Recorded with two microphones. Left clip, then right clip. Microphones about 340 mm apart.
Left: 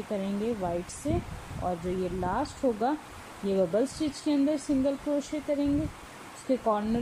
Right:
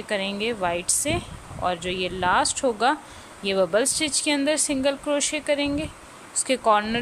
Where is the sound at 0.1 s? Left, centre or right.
Right.